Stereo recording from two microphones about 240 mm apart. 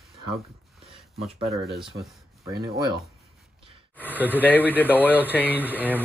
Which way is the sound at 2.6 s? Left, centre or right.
Centre.